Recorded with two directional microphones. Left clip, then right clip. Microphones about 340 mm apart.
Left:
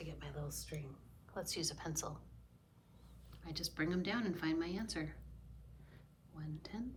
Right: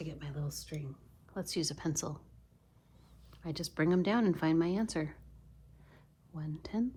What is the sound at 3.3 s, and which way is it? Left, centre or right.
Speech, centre.